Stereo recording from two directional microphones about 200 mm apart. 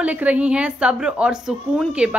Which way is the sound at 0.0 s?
5° right (ahead or behind).